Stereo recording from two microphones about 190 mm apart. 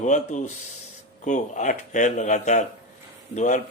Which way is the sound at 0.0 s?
40° left (ahead or behind).